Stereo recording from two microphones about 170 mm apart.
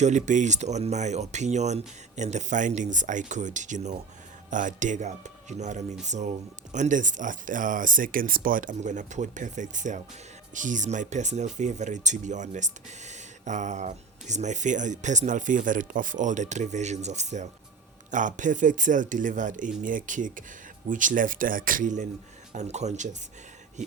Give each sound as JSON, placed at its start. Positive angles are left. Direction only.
{"t": 0.0, "sound": "speech", "side_deg": -45}